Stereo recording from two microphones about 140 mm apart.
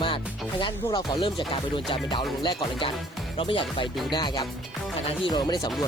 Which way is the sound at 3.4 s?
40° left (ahead or behind).